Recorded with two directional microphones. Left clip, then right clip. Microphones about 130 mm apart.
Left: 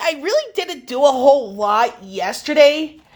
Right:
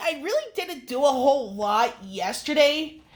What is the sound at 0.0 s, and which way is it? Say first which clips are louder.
A woman's voice: left 7 dB; 30° left (ahead or behind).